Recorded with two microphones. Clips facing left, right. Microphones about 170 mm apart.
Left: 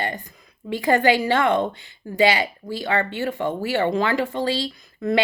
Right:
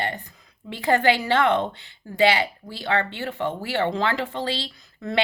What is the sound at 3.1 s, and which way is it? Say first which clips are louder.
Speech: left 3 dB; 45° left (ahead or behind).